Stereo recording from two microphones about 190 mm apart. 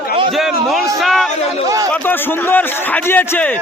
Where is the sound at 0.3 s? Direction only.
Centre (ahead or behind).